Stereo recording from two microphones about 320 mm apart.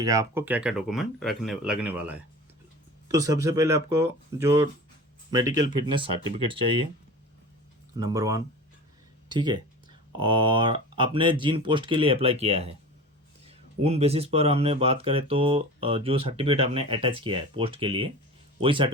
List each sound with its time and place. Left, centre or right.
0.0 s speech: centre
7.9 s speech: centre